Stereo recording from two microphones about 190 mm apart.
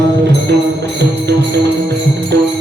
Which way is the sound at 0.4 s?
65° right (ahead or behind).